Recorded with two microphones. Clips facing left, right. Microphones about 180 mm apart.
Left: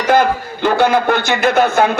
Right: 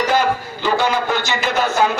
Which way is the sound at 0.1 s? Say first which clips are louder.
Left 5 dB; 55° left (ahead or behind).